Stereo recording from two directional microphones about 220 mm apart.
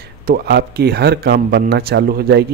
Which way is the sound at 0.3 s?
45° right (ahead or behind).